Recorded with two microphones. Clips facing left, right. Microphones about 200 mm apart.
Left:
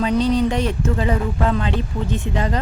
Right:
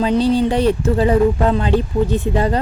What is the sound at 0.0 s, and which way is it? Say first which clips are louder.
Speech: right 3 dB; 30° right (ahead or behind).